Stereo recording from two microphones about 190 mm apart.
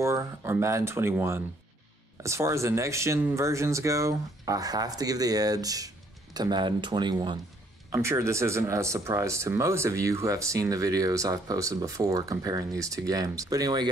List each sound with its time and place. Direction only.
0.0 s speech: 15° right (ahead or behind)